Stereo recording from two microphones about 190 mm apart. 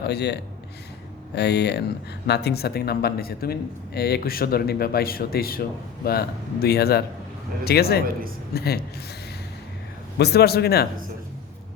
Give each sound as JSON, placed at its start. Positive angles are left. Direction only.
{"t": 0.0, "sound": "speech", "side_deg": 60}
{"t": 1.4, "sound": "speech", "side_deg": 60}
{"t": 10.2, "sound": "speech", "side_deg": 60}